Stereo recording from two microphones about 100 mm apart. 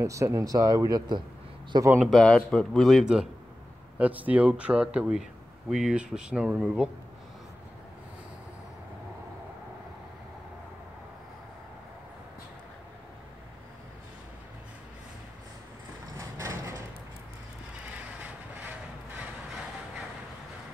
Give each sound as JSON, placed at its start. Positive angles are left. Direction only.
{"t": 0.0, "sound": "speech", "side_deg": -30}
{"t": 2.0, "sound": "speech", "side_deg": 0}
{"t": 4.0, "sound": "speech", "side_deg": -15}
{"t": 16.2, "sound": "vehicle", "side_deg": -30}
{"t": 18.2, "sound": "a sound", "side_deg": -15}